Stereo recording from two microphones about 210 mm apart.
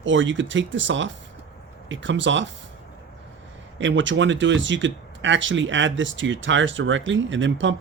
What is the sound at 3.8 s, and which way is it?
Speech, 60° right (ahead or behind).